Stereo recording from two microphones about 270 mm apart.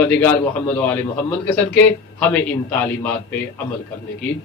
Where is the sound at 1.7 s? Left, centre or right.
Centre.